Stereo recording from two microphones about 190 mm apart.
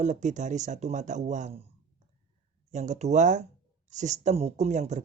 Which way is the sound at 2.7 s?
40° right (ahead or behind).